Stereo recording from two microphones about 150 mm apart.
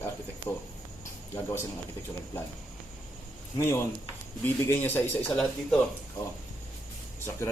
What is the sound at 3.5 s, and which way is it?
Speech, 20° left (ahead or behind).